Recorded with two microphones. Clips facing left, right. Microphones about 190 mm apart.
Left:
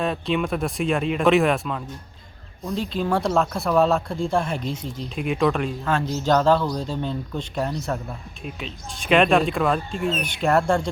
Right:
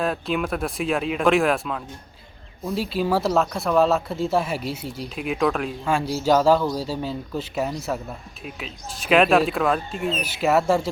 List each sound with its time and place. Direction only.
0.0 s speech: centre (ahead or behind)